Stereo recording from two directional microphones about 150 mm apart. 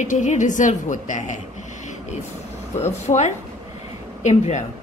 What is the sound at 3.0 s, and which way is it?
A woman's voice, 50° left (ahead or behind).